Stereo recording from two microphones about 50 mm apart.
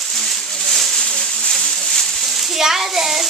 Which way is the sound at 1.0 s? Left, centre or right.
Centre.